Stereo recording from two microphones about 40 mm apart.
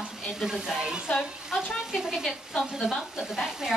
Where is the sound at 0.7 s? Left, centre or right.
Centre.